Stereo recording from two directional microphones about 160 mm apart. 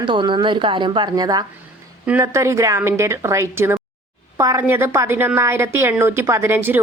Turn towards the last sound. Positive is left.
turn(degrees=-15)  # may be behind; listen again after turning